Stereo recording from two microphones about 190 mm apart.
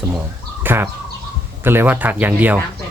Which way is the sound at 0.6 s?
10° right (ahead or behind).